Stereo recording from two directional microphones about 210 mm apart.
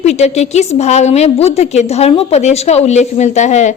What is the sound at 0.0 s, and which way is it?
A woman's voice, 30° left (ahead or behind).